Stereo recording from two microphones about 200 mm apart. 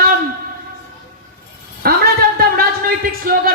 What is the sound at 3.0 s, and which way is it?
Speech, 45° right (ahead or behind).